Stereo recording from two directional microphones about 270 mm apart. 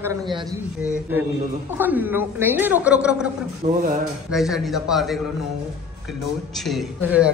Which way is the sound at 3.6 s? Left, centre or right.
Right.